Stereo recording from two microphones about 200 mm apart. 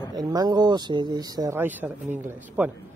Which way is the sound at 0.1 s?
20° right (ahead or behind).